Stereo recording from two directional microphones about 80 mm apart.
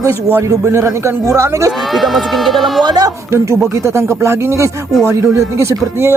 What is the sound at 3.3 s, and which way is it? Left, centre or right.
Speech, right.